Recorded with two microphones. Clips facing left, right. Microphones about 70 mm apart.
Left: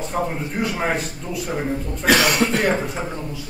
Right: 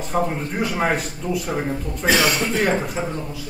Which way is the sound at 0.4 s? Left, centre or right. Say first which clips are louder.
Right 1 dB; centre.